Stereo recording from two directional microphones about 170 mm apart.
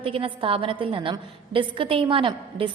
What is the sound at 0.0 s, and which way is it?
A woman's voice, 30° right (ahead or behind).